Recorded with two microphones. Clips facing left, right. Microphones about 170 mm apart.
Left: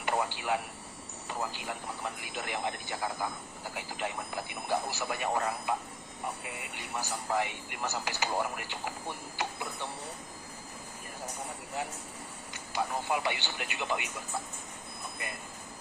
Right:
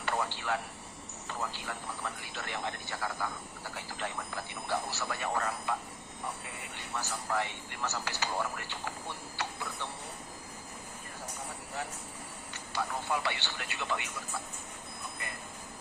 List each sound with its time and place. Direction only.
0.0 s a sound: 15° left (ahead or behind)
1.3 s speech: 15° left (ahead or behind)
12.7 s speech: 15° left (ahead or behind)